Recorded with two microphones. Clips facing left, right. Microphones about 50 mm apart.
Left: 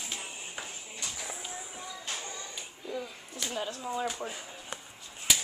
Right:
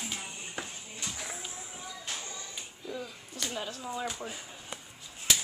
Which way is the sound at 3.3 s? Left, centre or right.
Centre.